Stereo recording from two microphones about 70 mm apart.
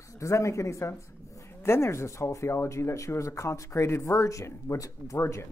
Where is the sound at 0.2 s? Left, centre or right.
Left.